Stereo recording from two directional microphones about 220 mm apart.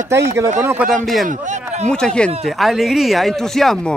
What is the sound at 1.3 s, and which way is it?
Speech, 35° right (ahead or behind).